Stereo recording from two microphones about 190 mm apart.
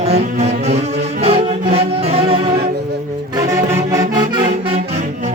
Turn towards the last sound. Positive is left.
turn(degrees=-30)  # may be behind; listen again after turning